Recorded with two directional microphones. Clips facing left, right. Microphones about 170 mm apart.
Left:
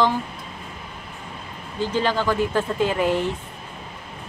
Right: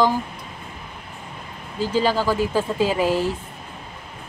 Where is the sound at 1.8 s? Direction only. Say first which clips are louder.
Right 2 dB; 10° right (ahead or behind).